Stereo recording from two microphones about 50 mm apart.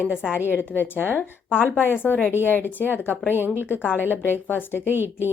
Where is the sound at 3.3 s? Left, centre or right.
Right.